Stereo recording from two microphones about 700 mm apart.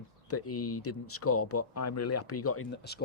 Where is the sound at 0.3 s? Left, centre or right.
Centre.